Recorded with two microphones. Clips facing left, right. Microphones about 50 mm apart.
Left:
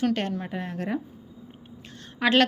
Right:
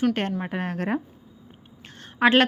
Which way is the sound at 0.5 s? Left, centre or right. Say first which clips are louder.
Right 3 dB; right.